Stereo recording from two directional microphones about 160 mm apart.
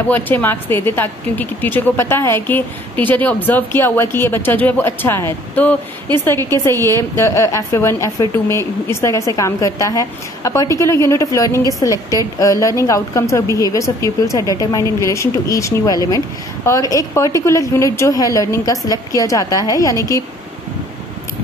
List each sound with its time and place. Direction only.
0.1 s speech: 10° left (ahead or behind)